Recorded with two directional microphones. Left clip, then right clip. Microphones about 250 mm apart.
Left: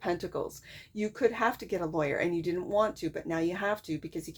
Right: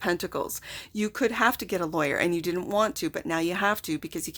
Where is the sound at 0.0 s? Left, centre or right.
Right.